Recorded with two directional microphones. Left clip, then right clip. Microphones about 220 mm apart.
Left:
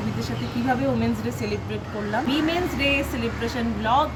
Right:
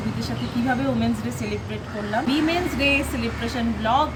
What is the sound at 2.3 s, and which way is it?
Speech, centre (ahead or behind).